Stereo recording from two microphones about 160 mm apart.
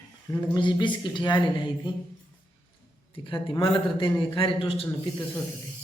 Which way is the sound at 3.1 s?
35° left (ahead or behind).